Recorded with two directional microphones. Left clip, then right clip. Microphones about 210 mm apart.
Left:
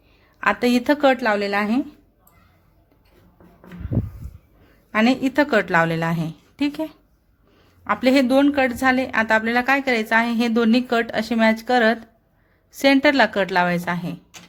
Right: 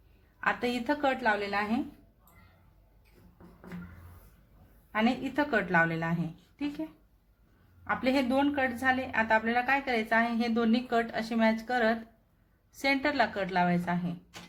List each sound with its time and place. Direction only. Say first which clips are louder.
0.3 s a woman's voice: left 11 dB; 50° left (ahead or behind)
4.9 s a woman's voice: left 10 dB; 50° left (ahead or behind)
7.9 s a woman's voice: left 11 dB; 50° left (ahead or behind)